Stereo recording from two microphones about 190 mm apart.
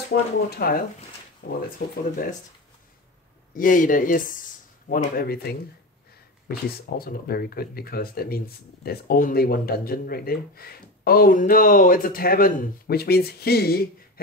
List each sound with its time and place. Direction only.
0.1 s speech: 55° left (ahead or behind)
3.5 s speech: 45° left (ahead or behind)